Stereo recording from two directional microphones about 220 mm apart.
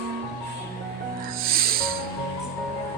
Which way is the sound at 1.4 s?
40° right (ahead or behind).